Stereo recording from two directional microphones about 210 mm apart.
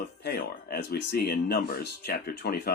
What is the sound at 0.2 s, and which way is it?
Speech, 50° left (ahead or behind).